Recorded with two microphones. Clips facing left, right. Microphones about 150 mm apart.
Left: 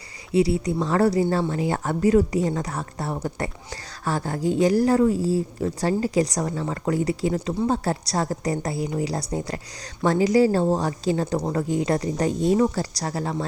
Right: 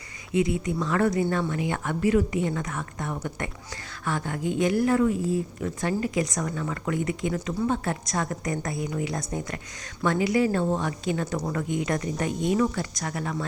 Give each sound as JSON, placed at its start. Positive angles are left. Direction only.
{"t": 0.3, "sound": "speech", "side_deg": 35}